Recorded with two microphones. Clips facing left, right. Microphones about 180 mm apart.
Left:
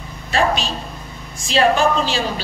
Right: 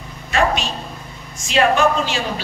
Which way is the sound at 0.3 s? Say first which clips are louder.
Even; 35° left (ahead or behind).